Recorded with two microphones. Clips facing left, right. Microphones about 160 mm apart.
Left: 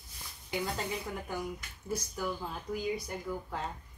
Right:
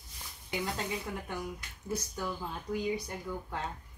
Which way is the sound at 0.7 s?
Centre (ahead or behind).